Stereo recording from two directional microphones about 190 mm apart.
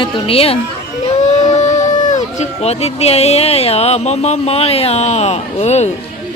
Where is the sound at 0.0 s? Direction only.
30° left (ahead or behind).